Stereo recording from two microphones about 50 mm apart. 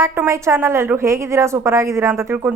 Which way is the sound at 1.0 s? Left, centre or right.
Right.